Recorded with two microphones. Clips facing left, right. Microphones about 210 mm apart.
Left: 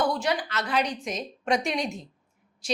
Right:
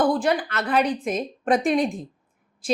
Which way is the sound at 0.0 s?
50° right (ahead or behind).